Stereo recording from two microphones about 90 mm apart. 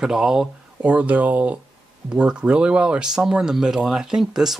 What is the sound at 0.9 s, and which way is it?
Speech, 15° right (ahead or behind).